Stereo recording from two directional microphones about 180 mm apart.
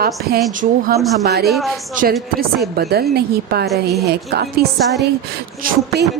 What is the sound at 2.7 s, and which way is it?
Speech, 60° right (ahead or behind).